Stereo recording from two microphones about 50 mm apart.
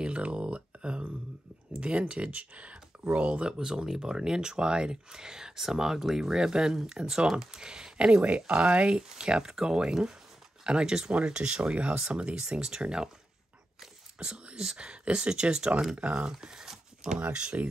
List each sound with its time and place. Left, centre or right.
0.0 s a sound: right
1.8 s speech: right
3.3 s speech: centre
14.1 s speech: right
16.3 s a sound: centre
17.3 s speech: right